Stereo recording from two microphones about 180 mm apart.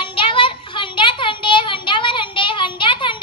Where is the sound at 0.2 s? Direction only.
30° left (ahead or behind).